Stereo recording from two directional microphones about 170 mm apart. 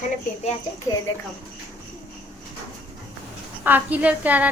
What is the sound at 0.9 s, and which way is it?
Speech, 20° left (ahead or behind).